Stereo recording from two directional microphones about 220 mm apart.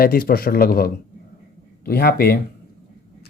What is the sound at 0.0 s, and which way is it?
Speech, 40° left (ahead or behind).